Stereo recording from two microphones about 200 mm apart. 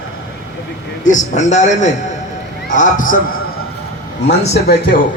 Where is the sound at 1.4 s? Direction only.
35° left (ahead or behind).